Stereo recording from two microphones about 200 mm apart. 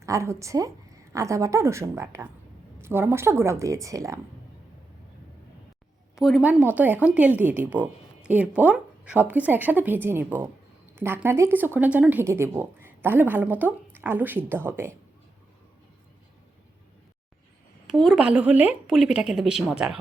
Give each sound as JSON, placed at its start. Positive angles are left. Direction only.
{"t": 0.0, "sound": "speech", "side_deg": -15}
{"t": 6.1, "sound": "speech", "side_deg": 0}
{"t": 17.8, "sound": "speech", "side_deg": 0}